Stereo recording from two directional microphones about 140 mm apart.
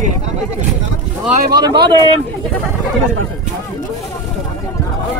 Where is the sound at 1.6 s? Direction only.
30° right (ahead or behind).